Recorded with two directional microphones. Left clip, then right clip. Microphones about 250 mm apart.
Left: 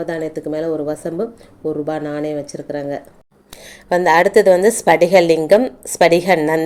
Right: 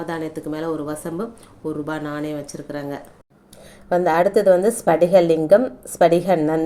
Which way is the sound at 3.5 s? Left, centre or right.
Centre.